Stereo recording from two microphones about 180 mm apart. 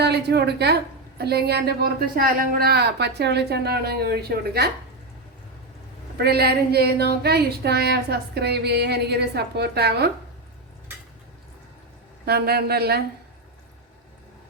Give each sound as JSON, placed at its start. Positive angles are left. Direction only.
{"t": 0.0, "sound": "a woman's voice", "side_deg": -65}
{"t": 6.1, "sound": "a woman's voice", "side_deg": -60}
{"t": 12.2, "sound": "a woman's voice", "side_deg": -60}